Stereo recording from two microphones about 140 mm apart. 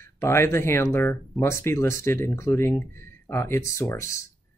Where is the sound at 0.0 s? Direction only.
20° left (ahead or behind).